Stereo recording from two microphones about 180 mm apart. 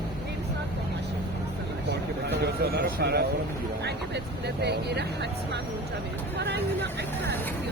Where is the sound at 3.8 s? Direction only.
70° right (ahead or behind).